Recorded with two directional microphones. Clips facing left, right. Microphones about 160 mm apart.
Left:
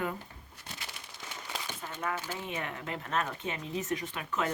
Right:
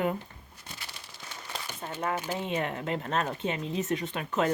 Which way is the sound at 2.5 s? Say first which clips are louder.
Right 8 dB; 30° right (ahead or behind).